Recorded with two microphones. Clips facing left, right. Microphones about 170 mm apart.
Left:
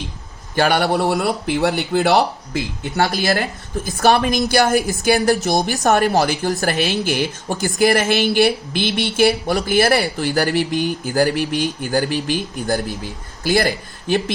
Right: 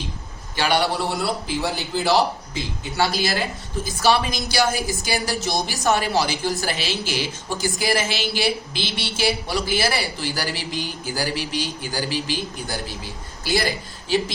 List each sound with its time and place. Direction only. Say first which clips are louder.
0.5 s speech: left 5 dB; 50° left (ahead or behind)
13.4 s speech: left 5 dB; 55° left (ahead or behind)